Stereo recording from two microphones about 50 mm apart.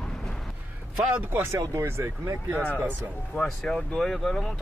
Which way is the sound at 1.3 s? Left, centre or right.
Right.